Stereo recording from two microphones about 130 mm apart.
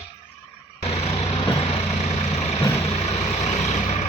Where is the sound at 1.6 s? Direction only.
55° left (ahead or behind).